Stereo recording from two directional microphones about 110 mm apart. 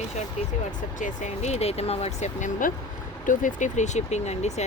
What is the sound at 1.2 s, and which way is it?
Speech, 90° left.